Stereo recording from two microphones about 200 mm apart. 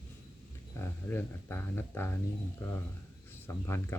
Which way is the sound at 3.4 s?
10° left (ahead or behind).